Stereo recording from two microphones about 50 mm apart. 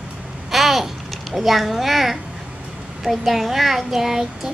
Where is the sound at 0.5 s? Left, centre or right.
Centre.